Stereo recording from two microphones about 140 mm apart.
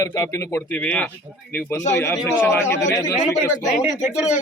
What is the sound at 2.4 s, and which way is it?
Speech, 20° left (ahead or behind).